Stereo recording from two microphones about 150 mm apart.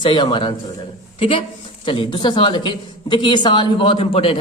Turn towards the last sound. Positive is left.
turn(degrees=40)  # may be behind; listen again after turning